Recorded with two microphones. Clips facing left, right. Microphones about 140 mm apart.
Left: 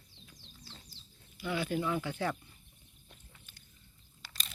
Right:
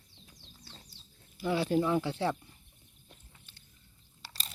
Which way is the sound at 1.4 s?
35° right (ahead or behind).